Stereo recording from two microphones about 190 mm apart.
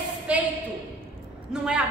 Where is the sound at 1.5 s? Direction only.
5° right (ahead or behind).